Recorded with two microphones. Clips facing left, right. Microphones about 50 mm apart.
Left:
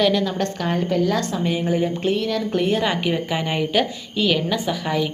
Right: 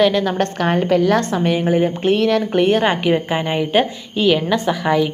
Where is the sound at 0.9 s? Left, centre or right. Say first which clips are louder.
Right 5 dB; right.